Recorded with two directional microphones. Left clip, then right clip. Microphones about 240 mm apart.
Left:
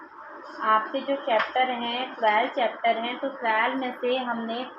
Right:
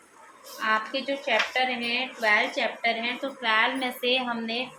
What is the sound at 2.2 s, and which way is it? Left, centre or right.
A woman's voice, centre.